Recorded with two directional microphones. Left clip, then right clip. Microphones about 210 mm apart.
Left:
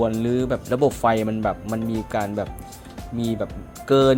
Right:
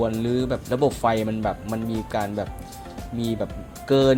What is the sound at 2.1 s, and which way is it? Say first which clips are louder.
Speech: left 1 dB; 10° left (ahead or behind).